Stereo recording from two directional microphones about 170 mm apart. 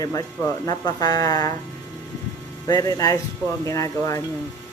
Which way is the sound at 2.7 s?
20° left (ahead or behind).